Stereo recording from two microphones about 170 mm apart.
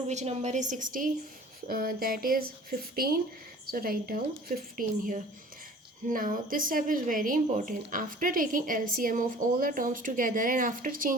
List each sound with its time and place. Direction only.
0.1 s speech: 45° right (ahead or behind)